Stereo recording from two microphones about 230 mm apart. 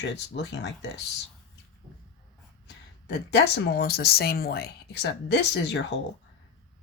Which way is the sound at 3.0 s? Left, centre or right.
Left.